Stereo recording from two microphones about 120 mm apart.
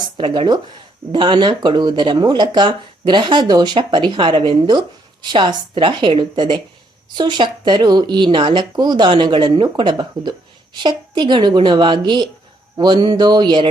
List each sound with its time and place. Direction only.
0.0 s speech: 40° right (ahead or behind)